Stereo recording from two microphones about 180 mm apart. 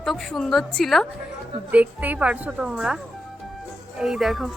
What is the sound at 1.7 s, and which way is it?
A woman's voice, 10° right (ahead or behind).